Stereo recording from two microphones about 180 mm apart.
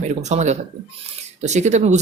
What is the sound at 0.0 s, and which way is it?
Speech, 40° right (ahead or behind).